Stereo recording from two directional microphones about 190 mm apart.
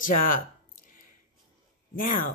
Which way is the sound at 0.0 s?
45° left (ahead or behind).